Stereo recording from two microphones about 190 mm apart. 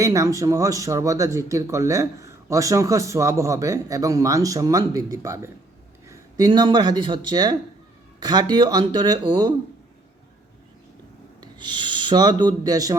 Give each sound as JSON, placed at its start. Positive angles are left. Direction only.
{"t": 0.0, "sound": "a man's voice", "side_deg": -15}
{"t": 11.3, "sound": "a man's voice", "side_deg": -25}